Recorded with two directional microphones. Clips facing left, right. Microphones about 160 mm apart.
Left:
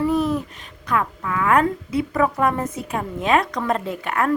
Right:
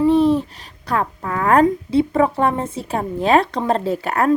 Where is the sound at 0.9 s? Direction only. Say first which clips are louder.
Right 1 dB; 35° right (ahead or behind).